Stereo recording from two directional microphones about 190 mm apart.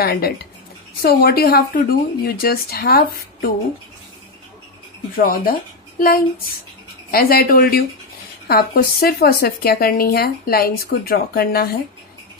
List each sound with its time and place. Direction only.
0.0 s speech: 55° left (ahead or behind)
5.1 s speech: 50° left (ahead or behind)